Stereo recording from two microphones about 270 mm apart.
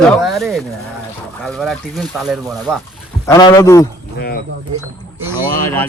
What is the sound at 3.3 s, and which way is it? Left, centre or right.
Speech, centre.